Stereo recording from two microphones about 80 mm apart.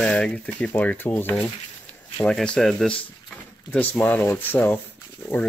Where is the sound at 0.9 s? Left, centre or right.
Left.